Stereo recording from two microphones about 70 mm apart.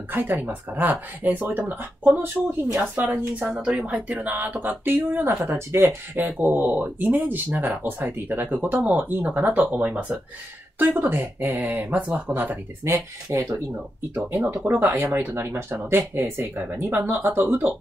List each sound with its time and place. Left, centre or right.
0.1 s speech: right
10.8 s speech: right
12.8 s speech: right
14.1 s speech: right